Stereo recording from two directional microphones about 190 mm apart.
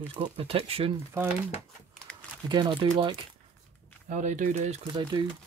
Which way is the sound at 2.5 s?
25° right (ahead or behind).